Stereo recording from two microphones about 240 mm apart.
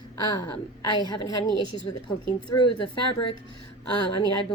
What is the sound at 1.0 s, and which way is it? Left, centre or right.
Speech, centre.